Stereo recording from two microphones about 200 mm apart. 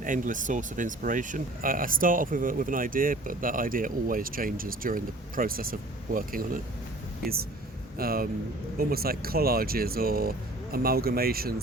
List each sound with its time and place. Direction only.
0.0 s speech: 40° right (ahead or behind)
7.9 s speech: 50° right (ahead or behind)